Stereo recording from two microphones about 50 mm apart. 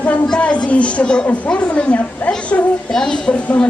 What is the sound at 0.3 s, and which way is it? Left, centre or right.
A woman's voice, left.